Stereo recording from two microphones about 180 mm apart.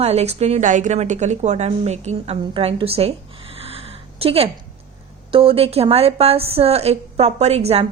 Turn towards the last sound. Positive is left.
turn(degrees=-35)  # may be behind; listen again after turning